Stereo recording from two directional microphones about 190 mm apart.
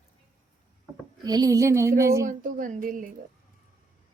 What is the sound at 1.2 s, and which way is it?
Speech, 20° right (ahead or behind).